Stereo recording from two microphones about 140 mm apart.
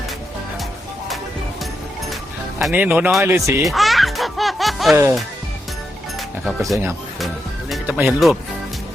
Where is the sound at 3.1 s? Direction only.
20° right (ahead or behind).